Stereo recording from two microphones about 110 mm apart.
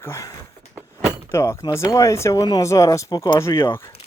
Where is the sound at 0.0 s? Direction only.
25° left (ahead or behind).